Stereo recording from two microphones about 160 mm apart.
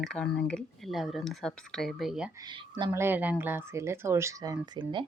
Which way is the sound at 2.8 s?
15° right (ahead or behind).